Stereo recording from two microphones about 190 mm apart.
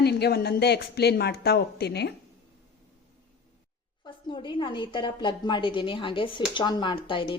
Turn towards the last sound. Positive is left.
turn(degrees=25)  # may be behind; listen again after turning